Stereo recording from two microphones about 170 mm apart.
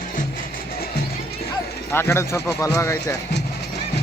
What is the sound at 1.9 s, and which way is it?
Speech, 15° left (ahead or behind).